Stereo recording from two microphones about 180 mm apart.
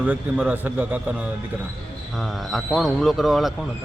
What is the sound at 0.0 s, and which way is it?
Speech, 5° right (ahead or behind).